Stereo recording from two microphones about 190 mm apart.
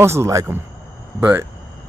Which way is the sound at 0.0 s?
15° right (ahead or behind).